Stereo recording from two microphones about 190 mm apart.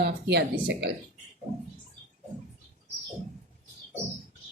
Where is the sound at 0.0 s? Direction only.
60° right (ahead or behind).